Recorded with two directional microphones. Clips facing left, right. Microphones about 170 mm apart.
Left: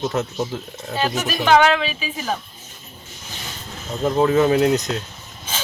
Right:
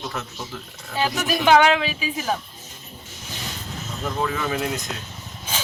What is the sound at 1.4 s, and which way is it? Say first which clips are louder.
Speech: left 1 dB; 10° right (ahead or behind).